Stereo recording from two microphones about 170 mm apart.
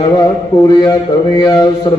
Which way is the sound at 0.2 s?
25° left (ahead or behind).